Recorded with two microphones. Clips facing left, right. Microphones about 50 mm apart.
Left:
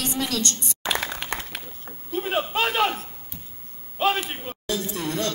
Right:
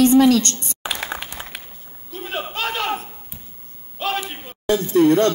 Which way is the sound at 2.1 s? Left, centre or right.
Centre.